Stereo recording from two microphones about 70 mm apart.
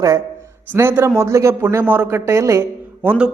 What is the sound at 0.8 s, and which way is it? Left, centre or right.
A man's voice, right.